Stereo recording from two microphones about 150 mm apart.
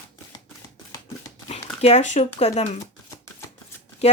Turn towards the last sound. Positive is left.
turn(degrees=45)  # may be behind; listen again after turning